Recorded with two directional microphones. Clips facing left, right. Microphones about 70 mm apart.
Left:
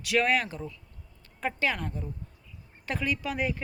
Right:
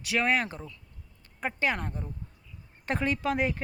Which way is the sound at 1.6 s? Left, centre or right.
Right.